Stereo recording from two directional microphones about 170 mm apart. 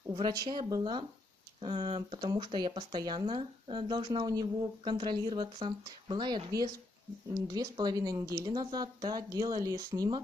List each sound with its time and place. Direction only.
0.1 s speech: 25° right (ahead or behind)